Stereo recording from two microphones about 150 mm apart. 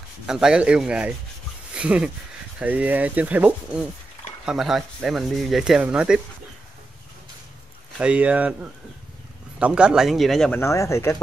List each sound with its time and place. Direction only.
0.3 s speech: 5° right (ahead or behind)
1.7 s a sound: 5° right (ahead or behind)
2.6 s speech: 10° right (ahead or behind)
8.0 s speech: 10° right (ahead or behind)
9.6 s speech: 5° right (ahead or behind)
10.5 s speech: 20° left (ahead or behind)